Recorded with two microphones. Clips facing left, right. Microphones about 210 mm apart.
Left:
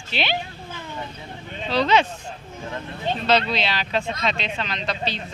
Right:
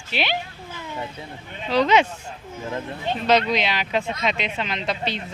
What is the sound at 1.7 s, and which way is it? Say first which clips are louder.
Speech: right 2 dB; 15° right (ahead or behind).